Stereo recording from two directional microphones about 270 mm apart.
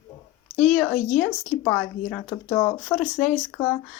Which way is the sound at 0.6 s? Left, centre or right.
Centre.